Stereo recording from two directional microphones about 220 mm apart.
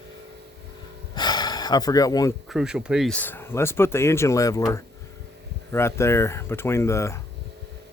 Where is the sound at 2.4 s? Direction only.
Centre (ahead or behind).